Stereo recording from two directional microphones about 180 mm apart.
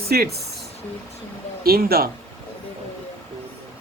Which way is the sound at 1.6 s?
55° right (ahead or behind).